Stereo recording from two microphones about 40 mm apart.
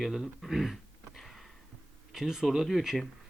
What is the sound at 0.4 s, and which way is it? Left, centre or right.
Throat clearing, centre.